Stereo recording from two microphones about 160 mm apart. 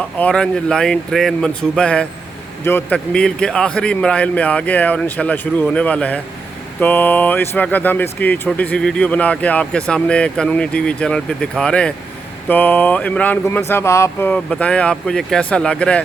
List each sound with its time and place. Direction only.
0.0 s speech: 10° left (ahead or behind)